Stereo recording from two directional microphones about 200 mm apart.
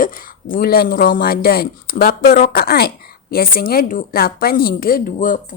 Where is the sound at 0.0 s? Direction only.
45° left (ahead or behind).